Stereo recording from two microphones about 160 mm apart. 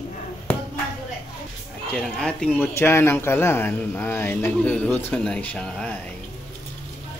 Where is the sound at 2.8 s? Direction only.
15° left (ahead or behind).